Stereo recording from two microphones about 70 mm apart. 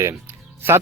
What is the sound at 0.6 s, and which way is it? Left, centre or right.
Speech, right.